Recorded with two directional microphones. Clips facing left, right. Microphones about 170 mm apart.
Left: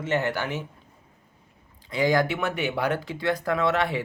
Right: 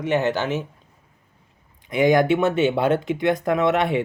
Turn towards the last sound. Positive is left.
turn(degrees=-20)  # may be behind; listen again after turning